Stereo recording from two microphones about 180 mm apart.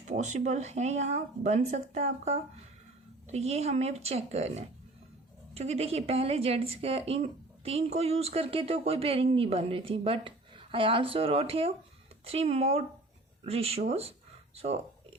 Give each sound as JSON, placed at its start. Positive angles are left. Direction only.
{"t": 0.0, "sound": "a woman's voice", "side_deg": -40}